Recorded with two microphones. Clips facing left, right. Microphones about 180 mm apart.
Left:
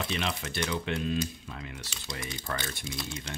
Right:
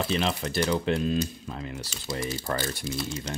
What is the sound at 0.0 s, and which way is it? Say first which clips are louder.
Speech: right 6 dB; 35° right (ahead or behind).